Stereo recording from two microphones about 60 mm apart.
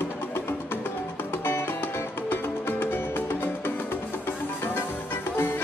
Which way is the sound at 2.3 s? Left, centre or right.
Left.